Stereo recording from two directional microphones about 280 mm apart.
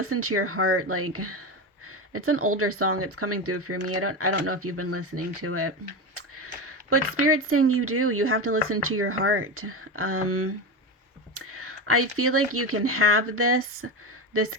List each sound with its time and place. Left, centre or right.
0.0 s speech: right
6.1 s tick-tock: right
6.7 s speech: right
11.3 s whispering: right
12.1 s speech: right